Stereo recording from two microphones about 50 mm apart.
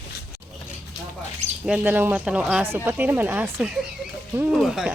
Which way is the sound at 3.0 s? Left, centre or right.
Right.